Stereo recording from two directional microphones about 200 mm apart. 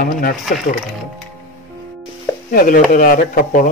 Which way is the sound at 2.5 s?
45° left (ahead or behind).